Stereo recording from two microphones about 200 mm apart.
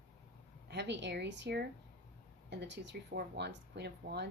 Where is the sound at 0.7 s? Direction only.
60° right (ahead or behind).